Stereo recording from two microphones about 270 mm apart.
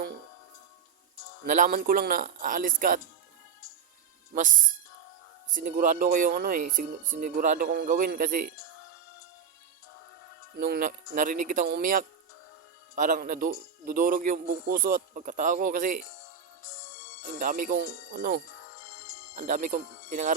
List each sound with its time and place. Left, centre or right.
1.5 s a man's voice: right
5.5 s a man's voice: right
10.6 s a man's voice: right
17.4 s a man's voice: right